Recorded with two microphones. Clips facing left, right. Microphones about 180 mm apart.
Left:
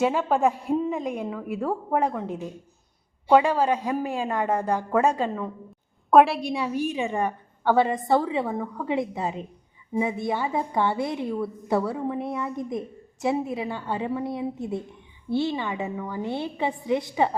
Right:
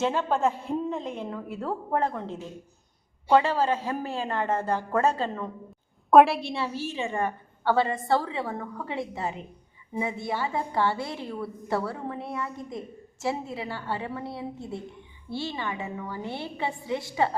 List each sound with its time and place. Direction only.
0.0 s a woman's voice: 10° left (ahead or behind)
6.5 s a woman's voice: 15° left (ahead or behind)